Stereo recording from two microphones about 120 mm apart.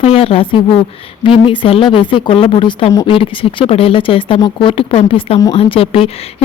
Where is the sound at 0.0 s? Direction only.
50° left (ahead or behind).